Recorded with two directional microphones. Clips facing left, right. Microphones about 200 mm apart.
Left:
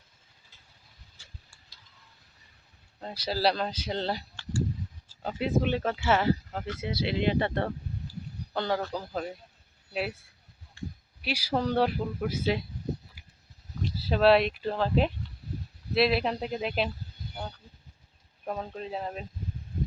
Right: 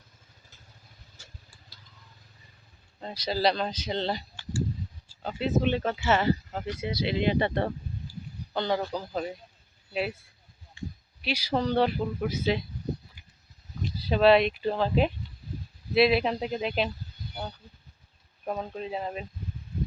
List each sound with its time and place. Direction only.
1.2 s vehicle: 45° right (ahead or behind)
3.0 s speech: 5° left (ahead or behind)
5.2 s speech: 10° left (ahead or behind)
11.2 s speech: 5° left (ahead or behind)
13.9 s speech: 5° left (ahead or behind)
18.4 s speech: 5° right (ahead or behind)